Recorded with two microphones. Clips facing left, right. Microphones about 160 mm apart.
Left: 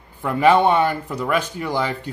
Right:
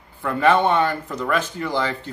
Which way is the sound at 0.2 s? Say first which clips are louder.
Left 2 dB; 15° left (ahead or behind).